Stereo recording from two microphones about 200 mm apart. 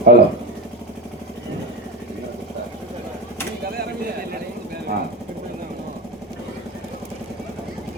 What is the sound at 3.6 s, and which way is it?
Vehicle, 50° right (ahead or behind).